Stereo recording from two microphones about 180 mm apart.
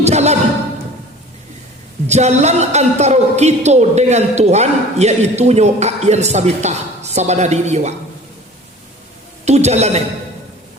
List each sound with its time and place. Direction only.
0.0 s a sound: 40° right (ahead or behind)
2.0 s a man's voice: 40° right (ahead or behind)
9.4 s a woman's voice: 40° right (ahead or behind)